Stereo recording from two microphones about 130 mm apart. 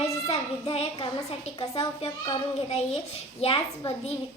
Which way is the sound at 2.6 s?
55° left (ahead or behind).